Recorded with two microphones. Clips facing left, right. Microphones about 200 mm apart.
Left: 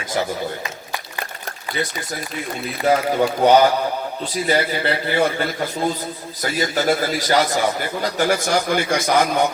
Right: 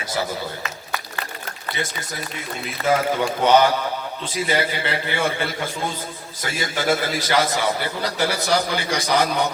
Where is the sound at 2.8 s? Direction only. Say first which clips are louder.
Left 3 dB; 45° left (ahead or behind).